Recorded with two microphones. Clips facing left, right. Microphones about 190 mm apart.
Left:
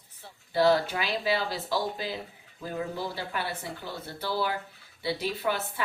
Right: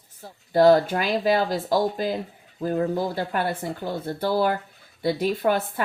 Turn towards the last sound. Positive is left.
turn(degrees=-50)  # may be behind; listen again after turning